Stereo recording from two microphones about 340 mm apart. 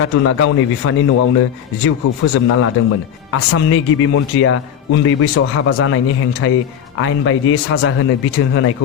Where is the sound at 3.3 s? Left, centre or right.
Left.